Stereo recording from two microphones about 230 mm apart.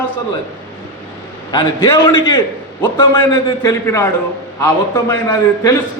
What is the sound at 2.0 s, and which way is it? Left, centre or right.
A man's voice, centre.